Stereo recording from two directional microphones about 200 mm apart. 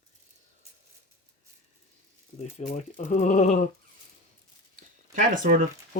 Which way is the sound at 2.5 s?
40° left (ahead or behind).